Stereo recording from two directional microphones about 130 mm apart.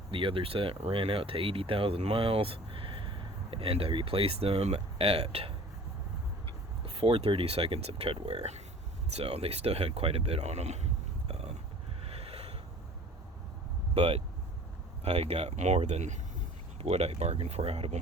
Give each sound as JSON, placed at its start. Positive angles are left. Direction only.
{"t": 0.1, "sound": "speech", "side_deg": -40}
{"t": 6.8, "sound": "speech", "side_deg": -45}
{"t": 11.3, "sound": "a sound", "side_deg": -50}
{"t": 13.9, "sound": "speech", "side_deg": -55}
{"t": 16.8, "sound": "speech", "side_deg": -50}